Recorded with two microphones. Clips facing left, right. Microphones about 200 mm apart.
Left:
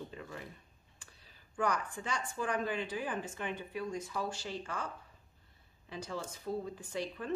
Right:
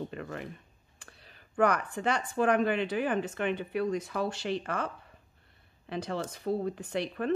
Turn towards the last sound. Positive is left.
turn(degrees=-70)  # may be behind; listen again after turning